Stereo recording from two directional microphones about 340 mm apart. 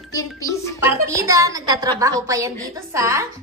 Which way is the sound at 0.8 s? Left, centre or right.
Centre.